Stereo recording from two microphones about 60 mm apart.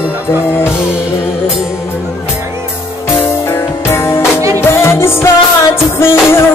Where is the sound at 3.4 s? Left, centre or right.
Left.